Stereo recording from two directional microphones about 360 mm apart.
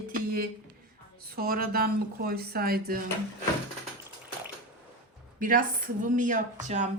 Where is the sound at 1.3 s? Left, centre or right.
Right.